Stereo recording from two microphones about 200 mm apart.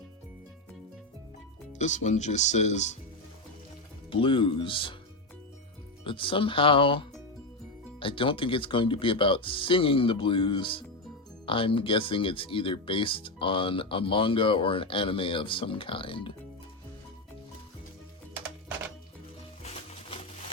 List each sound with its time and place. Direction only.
1.8 s speech: 35° left (ahead or behind)
4.1 s speech: 25° left (ahead or behind)
6.1 s speech: 25° left (ahead or behind)